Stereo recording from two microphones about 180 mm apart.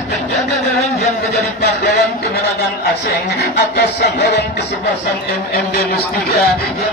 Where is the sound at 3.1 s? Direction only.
60° left (ahead or behind).